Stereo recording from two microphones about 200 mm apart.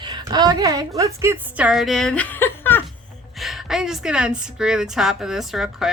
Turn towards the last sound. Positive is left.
turn(degrees=0)  # may be behind; listen again after turning